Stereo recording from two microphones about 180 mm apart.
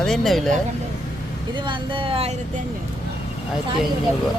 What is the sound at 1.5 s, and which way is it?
Speech, 25° right (ahead or behind).